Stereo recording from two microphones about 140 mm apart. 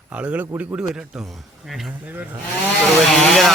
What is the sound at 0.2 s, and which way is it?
Speech, 10° right (ahead or behind).